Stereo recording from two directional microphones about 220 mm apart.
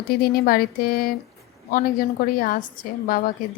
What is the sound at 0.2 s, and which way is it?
A woman's voice, 45° left (ahead or behind).